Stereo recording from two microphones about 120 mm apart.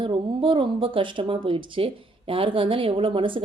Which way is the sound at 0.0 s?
45° right (ahead or behind).